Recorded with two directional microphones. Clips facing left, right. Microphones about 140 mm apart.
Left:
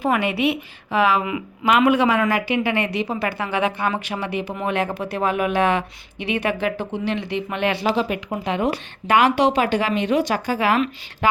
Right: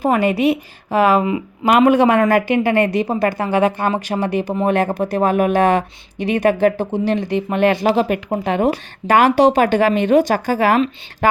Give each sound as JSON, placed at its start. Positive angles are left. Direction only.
{"t": 0.0, "sound": "speech", "side_deg": -40}